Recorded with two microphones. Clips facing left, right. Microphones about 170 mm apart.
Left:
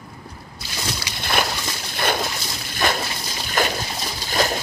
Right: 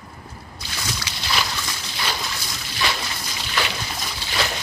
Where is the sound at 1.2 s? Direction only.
55° left (ahead or behind).